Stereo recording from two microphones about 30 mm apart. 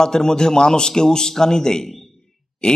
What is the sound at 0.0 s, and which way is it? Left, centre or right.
A man's voice, left.